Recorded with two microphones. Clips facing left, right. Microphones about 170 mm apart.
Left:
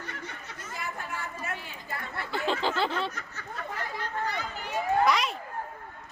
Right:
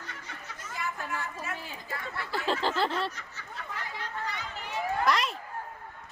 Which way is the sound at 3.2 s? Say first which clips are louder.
Left 4 dB; 50° left (ahead or behind).